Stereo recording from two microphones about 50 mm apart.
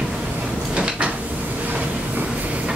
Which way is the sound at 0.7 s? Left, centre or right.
Right.